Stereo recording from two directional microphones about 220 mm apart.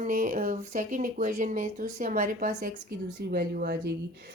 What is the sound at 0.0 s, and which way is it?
Speech, 40° right (ahead or behind).